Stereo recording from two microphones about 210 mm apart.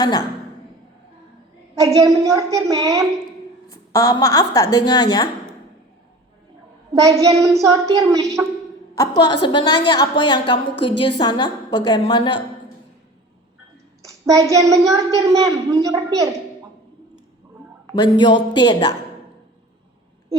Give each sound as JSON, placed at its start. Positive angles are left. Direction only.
{"t": 0.0, "sound": "a woman's voice", "side_deg": 20}
{"t": 1.7, "sound": "a woman's voice", "side_deg": -15}
{"t": 3.7, "sound": "a woman's voice", "side_deg": 15}
{"t": 7.0, "sound": "a woman's voice", "side_deg": -15}
{"t": 9.0, "sound": "a woman's voice", "side_deg": 20}
{"t": 14.0, "sound": "a woman's voice", "side_deg": -15}
{"t": 17.9, "sound": "a woman's voice", "side_deg": 20}